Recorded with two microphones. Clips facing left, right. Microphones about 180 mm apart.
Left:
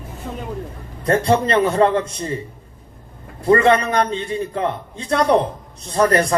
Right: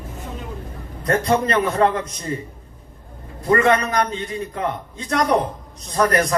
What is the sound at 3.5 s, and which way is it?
A man's voice, 30° left (ahead or behind).